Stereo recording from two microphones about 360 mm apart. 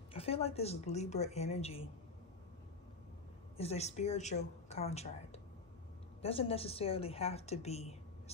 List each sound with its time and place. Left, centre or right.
0.1 s a woman's voice: centre
3.5 s a woman's voice: centre
6.2 s a woman's voice: centre